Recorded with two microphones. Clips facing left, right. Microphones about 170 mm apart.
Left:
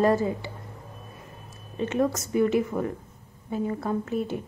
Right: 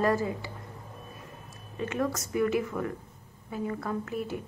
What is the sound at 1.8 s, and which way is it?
A woman's voice, 25° left (ahead or behind).